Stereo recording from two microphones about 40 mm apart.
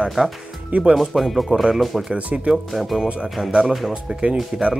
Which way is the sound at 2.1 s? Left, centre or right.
Right.